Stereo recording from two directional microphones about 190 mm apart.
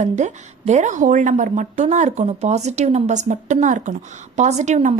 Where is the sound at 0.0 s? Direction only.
40° right (ahead or behind).